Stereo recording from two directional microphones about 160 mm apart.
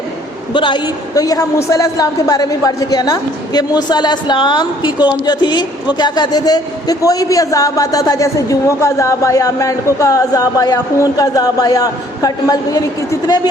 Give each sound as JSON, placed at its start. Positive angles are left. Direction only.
{"t": 0.5, "sound": "a man's voice", "side_deg": 30}